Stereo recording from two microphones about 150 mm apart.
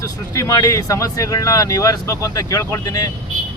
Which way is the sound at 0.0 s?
20° left (ahead or behind).